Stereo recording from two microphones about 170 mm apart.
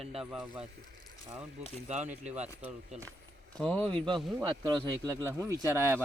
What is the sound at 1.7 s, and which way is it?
Speech, 40° right (ahead or behind).